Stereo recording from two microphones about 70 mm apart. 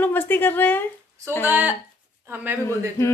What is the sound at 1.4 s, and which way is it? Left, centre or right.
Speech, right.